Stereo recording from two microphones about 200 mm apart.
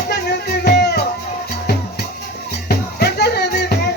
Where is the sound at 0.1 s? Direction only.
55° left (ahead or behind).